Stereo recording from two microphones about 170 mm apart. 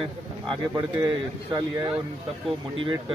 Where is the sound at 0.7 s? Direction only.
25° right (ahead or behind).